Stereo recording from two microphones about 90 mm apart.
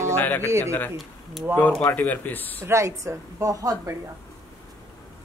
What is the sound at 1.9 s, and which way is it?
Speech, 20° left (ahead or behind).